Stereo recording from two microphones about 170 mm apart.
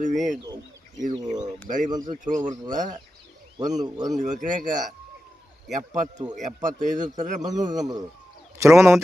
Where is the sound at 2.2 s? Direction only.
50° right (ahead or behind).